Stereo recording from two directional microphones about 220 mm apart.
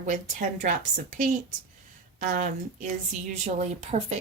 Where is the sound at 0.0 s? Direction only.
35° right (ahead or behind).